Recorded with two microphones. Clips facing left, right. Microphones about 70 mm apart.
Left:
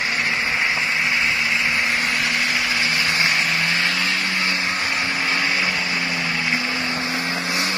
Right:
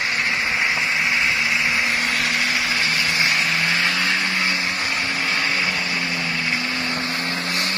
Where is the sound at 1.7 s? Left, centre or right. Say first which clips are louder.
Even; centre.